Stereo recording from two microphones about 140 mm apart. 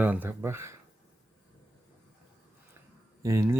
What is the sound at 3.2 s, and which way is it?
Speech, 20° right (ahead or behind).